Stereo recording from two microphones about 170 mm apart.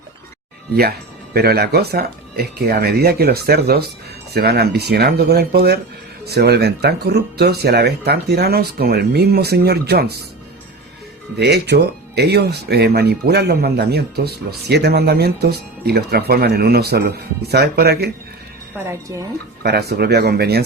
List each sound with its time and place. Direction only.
0.8 s speech: 65° right (ahead or behind)
11.3 s speech: 80° right
18.9 s speech: 20° right (ahead or behind)
19.6 s speech: 70° right (ahead or behind)